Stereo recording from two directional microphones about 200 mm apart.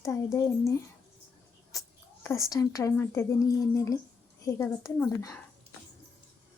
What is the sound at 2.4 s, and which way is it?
Speech, 15° left (ahead or behind).